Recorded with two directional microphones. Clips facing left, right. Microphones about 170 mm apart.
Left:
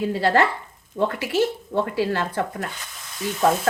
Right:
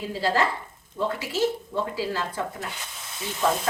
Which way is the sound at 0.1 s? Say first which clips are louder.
Left 2 dB; 60° left (ahead or behind).